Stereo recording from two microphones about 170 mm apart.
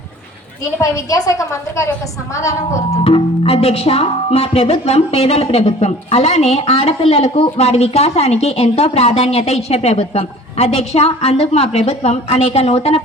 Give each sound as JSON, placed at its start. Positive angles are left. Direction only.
{"t": 0.8, "sound": "a woman's voice", "side_deg": 20}
{"t": 2.9, "sound": "speech", "side_deg": 35}